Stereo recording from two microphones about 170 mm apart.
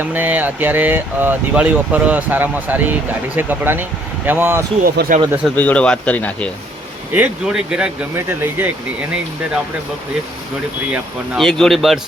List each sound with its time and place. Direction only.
0.0 s speech: 10° right (ahead or behind)
4.8 s speech: 55° right (ahead or behind)
5.5 s speech: 10° left (ahead or behind)
7.1 s speech: 5° right (ahead or behind)
10.9 s speech: centre (ahead or behind)